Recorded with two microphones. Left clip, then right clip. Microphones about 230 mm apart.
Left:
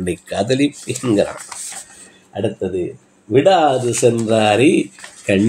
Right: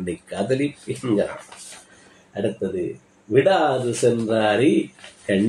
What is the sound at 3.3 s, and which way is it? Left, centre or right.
Speech, left.